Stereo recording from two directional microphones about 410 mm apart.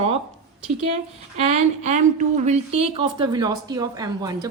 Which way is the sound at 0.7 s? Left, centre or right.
Centre.